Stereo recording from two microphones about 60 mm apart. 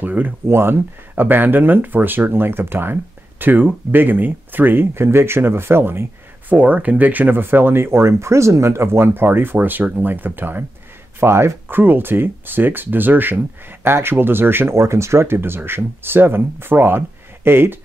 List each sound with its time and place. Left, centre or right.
0.0 s speech: right
0.5 s speech: right
6.5 s speech: right
11.1 s speech: right